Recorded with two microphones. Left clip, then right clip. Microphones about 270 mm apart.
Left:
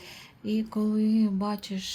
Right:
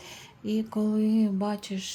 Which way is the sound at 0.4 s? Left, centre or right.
Centre.